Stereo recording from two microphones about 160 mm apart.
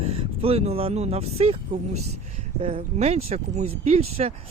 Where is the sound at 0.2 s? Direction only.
35° right (ahead or behind).